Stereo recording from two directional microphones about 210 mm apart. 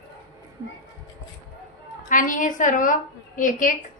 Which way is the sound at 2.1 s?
40° left (ahead or behind).